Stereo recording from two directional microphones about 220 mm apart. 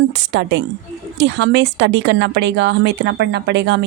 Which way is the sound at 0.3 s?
55° right (ahead or behind).